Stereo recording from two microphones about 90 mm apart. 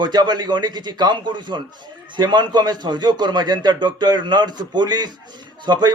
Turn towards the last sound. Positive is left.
turn(degrees=-50)  # may be behind; listen again after turning